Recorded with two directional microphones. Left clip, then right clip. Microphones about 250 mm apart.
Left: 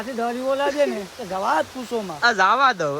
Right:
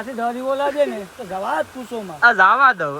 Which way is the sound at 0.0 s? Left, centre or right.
Centre.